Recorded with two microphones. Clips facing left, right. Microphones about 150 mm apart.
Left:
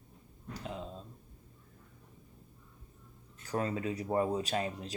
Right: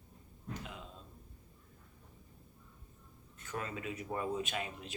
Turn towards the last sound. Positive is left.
turn(degrees=35)  # may be behind; listen again after turning